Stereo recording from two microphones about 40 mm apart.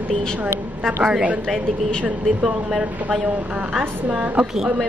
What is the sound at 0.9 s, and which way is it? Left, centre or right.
Speech, centre.